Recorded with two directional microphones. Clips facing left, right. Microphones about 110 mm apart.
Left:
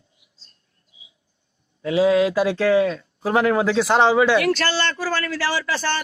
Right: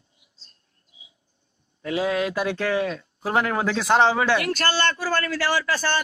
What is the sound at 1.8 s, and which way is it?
Speech, 30° left (ahead or behind).